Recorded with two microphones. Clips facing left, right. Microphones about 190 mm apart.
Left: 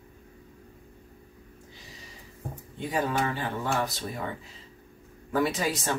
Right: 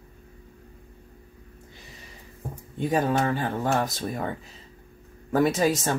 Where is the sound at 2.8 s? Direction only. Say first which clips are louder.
Right 5 dB; 45° right (ahead or behind).